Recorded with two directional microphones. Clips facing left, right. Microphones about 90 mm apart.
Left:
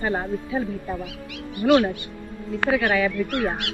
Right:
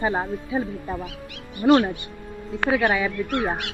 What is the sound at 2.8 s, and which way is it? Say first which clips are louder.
Speech: even; 15° right (ahead or behind).